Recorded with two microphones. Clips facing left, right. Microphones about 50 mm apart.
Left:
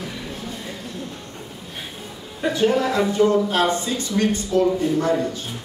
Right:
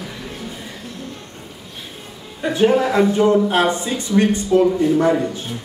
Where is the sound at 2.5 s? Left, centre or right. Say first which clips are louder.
Right 5 dB; centre.